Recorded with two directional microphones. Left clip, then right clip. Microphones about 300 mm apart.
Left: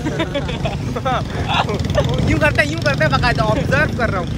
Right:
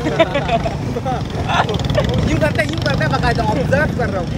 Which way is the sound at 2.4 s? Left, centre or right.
Left.